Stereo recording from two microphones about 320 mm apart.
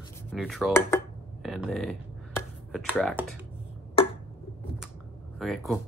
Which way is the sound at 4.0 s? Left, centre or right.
Centre.